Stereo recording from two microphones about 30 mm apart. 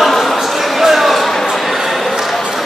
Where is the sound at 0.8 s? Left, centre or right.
Centre.